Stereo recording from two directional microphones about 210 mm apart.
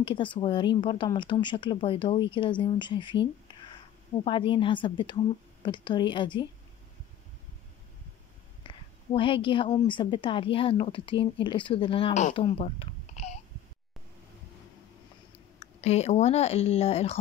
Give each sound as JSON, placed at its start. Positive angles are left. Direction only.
{"t": 0.0, "sound": "a woman's voice", "side_deg": 25}
{"t": 4.2, "sound": "a woman's voice", "side_deg": 25}
{"t": 8.6, "sound": "a woman's voice", "side_deg": 25}
{"t": 12.4, "sound": "a sound", "side_deg": 25}
{"t": 15.6, "sound": "speech", "side_deg": 30}